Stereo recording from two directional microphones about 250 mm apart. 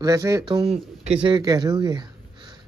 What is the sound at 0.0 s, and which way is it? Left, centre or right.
A man's voice, centre.